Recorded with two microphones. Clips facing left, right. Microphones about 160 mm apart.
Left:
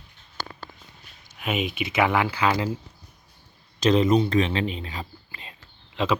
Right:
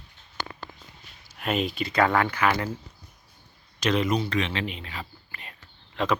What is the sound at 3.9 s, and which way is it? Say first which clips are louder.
Speech: left 5 dB; 30° left (ahead or behind).